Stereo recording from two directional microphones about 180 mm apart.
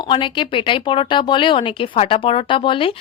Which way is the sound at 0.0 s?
25° left (ahead or behind).